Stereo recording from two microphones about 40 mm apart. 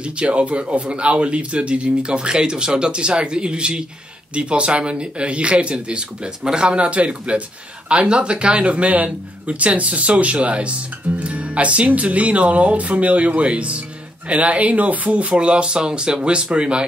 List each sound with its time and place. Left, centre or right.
0.0 s a man's voice: right